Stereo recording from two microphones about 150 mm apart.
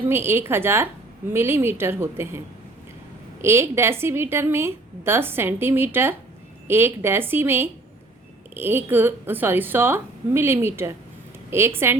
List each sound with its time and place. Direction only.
0.1 s a woman's voice: 15° right (ahead or behind)
3.4 s a woman's voice: 15° right (ahead or behind)